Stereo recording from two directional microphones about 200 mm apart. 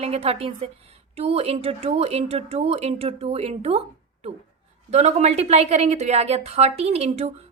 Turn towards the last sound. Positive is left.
turn(degrees=-35)  # may be behind; listen again after turning